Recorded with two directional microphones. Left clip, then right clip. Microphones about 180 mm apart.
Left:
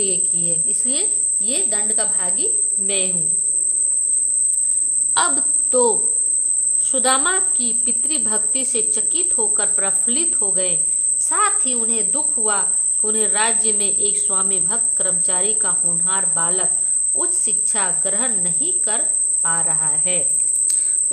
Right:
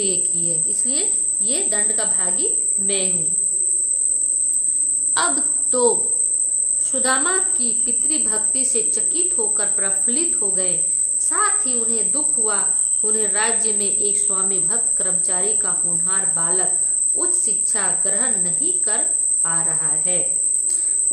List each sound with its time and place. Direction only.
0.3 s a woman's voice: 30° left (ahead or behind)
5.1 s a woman's voice: 25° left (ahead or behind)